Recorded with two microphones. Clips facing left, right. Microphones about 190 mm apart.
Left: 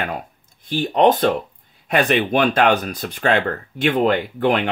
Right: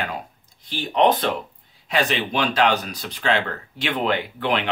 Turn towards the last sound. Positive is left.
turn(degrees=50)  # may be behind; listen again after turning